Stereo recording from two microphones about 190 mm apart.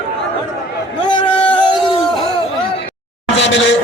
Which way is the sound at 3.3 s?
75° left (ahead or behind).